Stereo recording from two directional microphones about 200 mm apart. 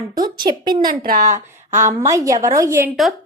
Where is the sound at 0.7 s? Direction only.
45° right (ahead or behind).